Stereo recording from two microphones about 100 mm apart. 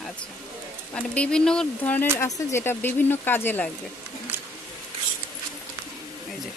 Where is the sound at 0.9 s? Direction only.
10° left (ahead or behind).